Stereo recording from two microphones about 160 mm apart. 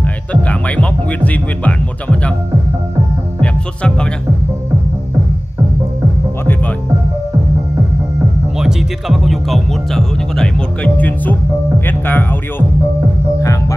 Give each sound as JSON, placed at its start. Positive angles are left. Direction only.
{"t": 0.0, "sound": "music", "side_deg": 10}
{"t": 3.3, "sound": "music", "side_deg": 5}
{"t": 8.5, "sound": "speech", "side_deg": 0}
{"t": 13.4, "sound": "music", "side_deg": 20}